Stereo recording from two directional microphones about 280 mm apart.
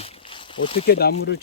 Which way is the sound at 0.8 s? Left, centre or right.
Left.